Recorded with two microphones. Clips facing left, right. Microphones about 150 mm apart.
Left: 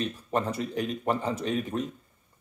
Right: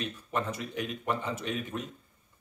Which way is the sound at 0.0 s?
35° left (ahead or behind).